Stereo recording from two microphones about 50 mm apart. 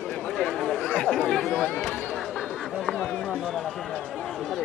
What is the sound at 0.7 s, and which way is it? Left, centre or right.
Chatter, centre.